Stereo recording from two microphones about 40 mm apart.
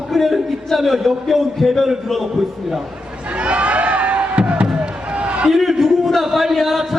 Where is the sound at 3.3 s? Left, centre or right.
Right.